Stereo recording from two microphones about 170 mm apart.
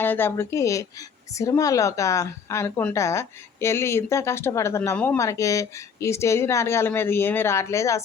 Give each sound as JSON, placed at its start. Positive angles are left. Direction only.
{"t": 0.0, "sound": "speech", "side_deg": 10}